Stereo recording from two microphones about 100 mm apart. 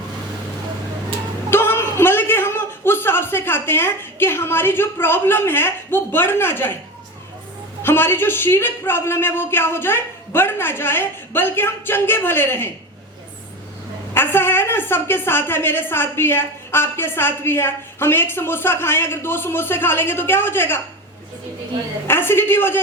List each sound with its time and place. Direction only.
1.5 s a man's voice: 25° left (ahead or behind)
7.8 s a woman's voice: 20° left (ahead or behind)
14.1 s a woman's voice: 25° left (ahead or behind)
22.0 s a woman's voice: 25° left (ahead or behind)